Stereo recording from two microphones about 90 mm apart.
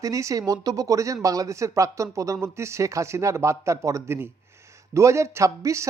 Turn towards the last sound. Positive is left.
turn(degrees=-35)  # may be behind; listen again after turning